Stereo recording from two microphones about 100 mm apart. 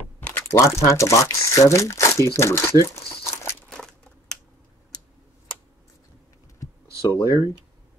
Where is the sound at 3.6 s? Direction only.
5° left (ahead or behind).